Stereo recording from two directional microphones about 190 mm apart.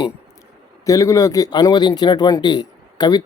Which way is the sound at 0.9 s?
15° left (ahead or behind).